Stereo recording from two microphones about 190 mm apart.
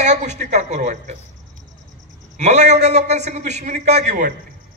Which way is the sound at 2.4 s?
35° right (ahead or behind).